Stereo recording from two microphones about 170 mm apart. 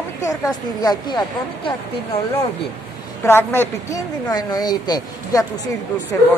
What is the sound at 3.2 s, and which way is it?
Speech, 15° left (ahead or behind).